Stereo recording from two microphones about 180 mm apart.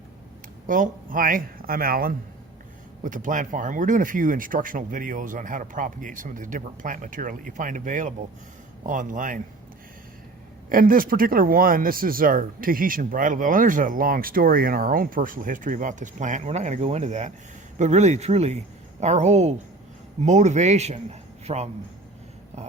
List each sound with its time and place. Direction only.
0.7 s speech: 50° right (ahead or behind)
10.7 s a man's voice: 50° right (ahead or behind)